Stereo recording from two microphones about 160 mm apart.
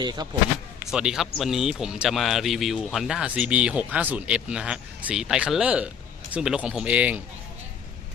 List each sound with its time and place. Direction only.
0.0 s speech: 25° right (ahead or behind)
0.9 s speech: 5° right (ahead or behind)